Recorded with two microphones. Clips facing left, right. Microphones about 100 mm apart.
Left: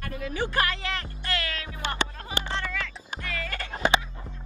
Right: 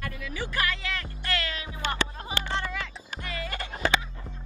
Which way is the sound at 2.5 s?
20° right (ahead or behind).